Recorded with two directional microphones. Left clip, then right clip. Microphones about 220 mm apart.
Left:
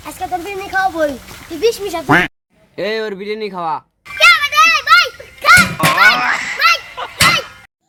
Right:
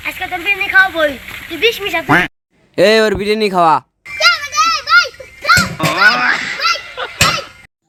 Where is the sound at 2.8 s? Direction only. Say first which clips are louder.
Right 10 dB; 50° right (ahead or behind).